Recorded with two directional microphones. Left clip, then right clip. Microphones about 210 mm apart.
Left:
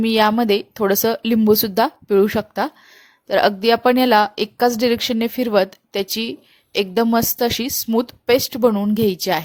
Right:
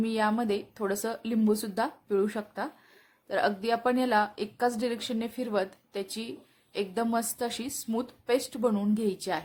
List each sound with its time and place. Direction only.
0.0 s speech: 40° left (ahead or behind)